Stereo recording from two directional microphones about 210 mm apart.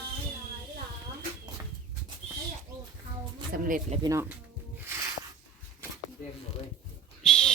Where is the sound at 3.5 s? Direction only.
40° right (ahead or behind).